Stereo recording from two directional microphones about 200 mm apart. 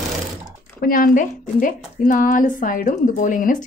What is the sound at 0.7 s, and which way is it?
Speech, 45° left (ahead or behind).